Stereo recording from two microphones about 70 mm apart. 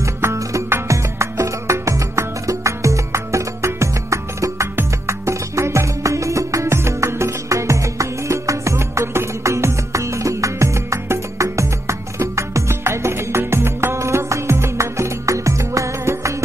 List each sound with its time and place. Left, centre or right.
0.0 s music: right